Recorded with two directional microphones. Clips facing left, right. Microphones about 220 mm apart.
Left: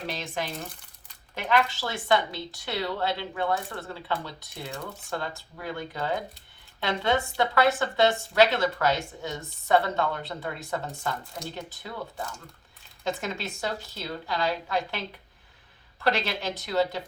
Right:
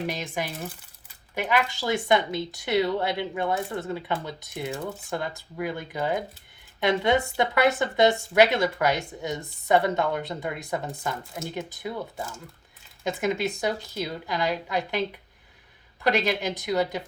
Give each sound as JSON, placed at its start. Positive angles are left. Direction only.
{"t": 0.1, "sound": "a woman's voice", "side_deg": -15}
{"t": 16.0, "sound": "a woman's voice", "side_deg": -15}